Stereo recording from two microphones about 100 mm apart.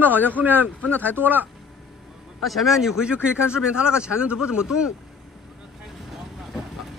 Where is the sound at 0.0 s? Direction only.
20° right (ahead or behind).